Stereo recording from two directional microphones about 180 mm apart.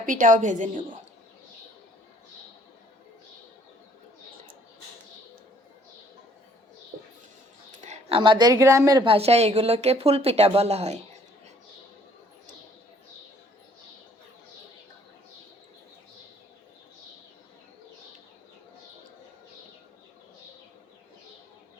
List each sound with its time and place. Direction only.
0.0 s a woman's voice: 45° right (ahead or behind)
7.9 s speech: 30° right (ahead or behind)
9.1 s speech: 35° right (ahead or behind)